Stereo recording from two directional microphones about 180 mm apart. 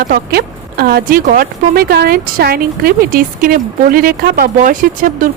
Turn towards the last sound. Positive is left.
turn(degrees=-45)  # may be behind; listen again after turning